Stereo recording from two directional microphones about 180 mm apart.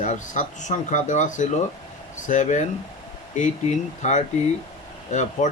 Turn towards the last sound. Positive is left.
turn(degrees=40)  # may be behind; listen again after turning